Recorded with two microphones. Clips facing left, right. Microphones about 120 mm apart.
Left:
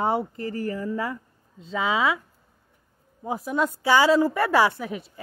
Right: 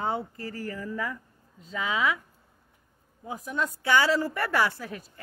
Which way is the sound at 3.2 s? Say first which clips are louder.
Left 6 dB; 30° left (ahead or behind).